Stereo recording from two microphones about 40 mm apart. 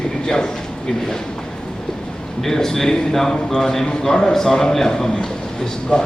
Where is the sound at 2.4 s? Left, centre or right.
Centre.